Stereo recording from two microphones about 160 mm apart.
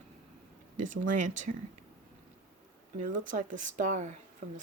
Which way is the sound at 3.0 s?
55° right (ahead or behind).